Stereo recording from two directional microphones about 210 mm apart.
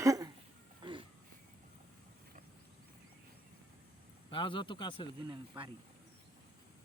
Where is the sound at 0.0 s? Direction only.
15° right (ahead or behind).